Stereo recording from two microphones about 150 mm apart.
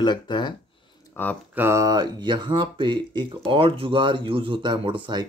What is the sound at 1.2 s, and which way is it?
Speech, 15° left (ahead or behind).